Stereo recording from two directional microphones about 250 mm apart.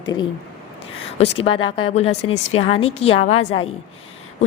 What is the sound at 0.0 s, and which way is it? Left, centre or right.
A woman's voice, centre.